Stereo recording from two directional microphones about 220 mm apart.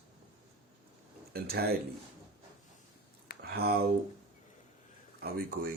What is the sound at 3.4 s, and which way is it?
Speech, 45° right (ahead or behind).